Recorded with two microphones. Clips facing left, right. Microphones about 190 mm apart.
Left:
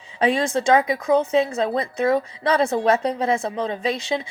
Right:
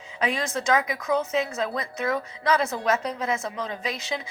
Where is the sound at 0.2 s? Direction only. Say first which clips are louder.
Left 7 dB; 30° left (ahead or behind).